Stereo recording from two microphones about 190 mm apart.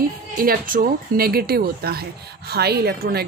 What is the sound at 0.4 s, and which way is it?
A woman's voice, 50° right (ahead or behind).